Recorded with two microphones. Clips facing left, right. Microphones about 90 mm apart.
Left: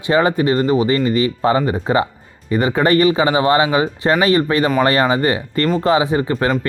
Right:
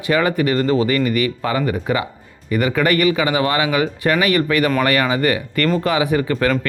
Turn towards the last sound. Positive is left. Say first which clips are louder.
# left 1 dB
turn(degrees=25)  # may be behind; listen again after turning